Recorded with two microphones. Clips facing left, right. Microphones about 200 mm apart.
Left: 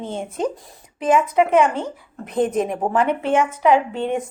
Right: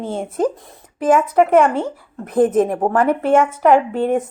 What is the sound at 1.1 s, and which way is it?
Speech, 45° right (ahead or behind).